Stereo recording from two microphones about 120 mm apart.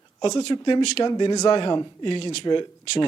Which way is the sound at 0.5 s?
40° left (ahead or behind).